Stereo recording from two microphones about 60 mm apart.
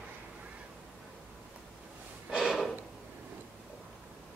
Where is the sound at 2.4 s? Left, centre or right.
Centre.